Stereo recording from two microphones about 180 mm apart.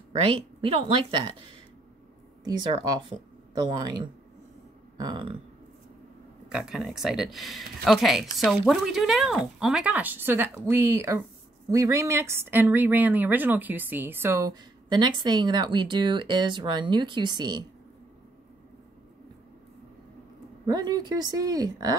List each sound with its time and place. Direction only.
0.2 s a woman's voice: 30° right (ahead or behind)
2.4 s a woman's voice: 25° right (ahead or behind)
6.5 s a woman's voice: 5° right (ahead or behind); by 17.6 s 25° right (ahead or behind)
20.6 s a woman's voice: 20° right (ahead or behind)